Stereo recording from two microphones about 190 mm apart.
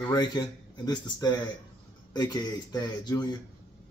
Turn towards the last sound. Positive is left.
turn(degrees=20)  # may be behind; listen again after turning